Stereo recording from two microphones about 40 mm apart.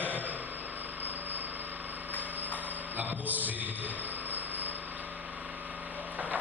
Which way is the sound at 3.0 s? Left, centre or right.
Right.